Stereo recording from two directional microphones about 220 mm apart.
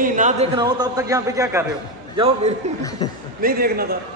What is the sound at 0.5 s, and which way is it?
A man's voice, 20° right (ahead or behind).